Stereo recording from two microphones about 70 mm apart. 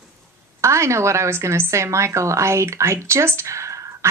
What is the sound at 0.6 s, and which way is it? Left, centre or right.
A woman's voice, right.